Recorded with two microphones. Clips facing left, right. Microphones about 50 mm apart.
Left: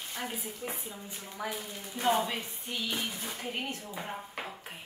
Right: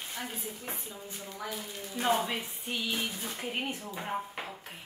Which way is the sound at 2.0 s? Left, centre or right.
Centre.